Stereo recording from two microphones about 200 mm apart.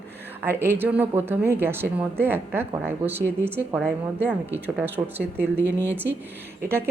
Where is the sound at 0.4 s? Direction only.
10° right (ahead or behind).